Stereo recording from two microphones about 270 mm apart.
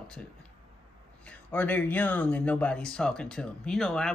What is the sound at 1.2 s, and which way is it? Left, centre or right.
Speech, centre.